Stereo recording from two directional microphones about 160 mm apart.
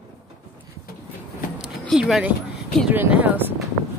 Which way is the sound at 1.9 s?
Centre (ahead or behind).